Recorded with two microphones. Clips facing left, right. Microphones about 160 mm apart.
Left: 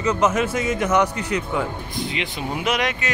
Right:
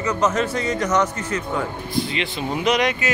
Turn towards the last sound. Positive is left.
turn(degrees=5)  # may be behind; listen again after turning